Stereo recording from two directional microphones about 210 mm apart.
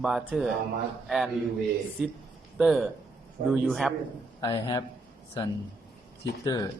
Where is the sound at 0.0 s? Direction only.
Centre (ahead or behind).